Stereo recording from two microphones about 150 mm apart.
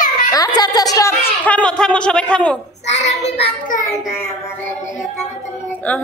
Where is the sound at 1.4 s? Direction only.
10° left (ahead or behind).